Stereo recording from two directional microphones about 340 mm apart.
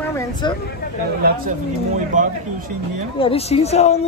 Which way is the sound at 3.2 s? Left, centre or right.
Centre.